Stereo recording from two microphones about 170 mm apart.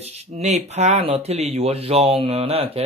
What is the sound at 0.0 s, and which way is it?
Speech, 40° right (ahead or behind).